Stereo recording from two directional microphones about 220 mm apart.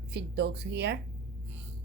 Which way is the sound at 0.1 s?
50° right (ahead or behind).